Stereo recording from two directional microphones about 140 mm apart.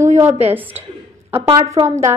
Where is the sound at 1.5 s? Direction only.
25° right (ahead or behind).